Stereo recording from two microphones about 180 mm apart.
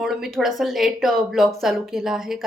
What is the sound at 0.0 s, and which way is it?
A woman's voice, centre (ahead or behind).